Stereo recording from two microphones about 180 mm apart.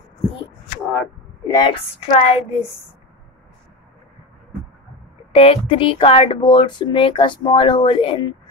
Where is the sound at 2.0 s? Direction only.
35° left (ahead or behind).